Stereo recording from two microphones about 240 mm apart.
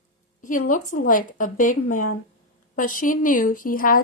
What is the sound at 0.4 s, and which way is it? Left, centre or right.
A woman's voice, left.